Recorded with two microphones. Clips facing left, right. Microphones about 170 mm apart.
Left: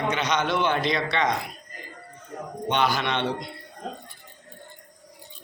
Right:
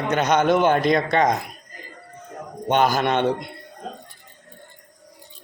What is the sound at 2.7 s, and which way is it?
Speech, 45° right (ahead or behind).